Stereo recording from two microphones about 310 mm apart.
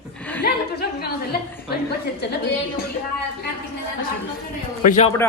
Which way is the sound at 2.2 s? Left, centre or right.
Left.